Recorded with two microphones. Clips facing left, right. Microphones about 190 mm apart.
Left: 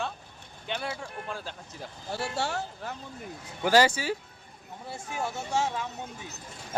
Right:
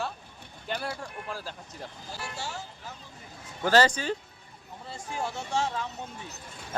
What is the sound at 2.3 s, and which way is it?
Speech, 65° left (ahead or behind).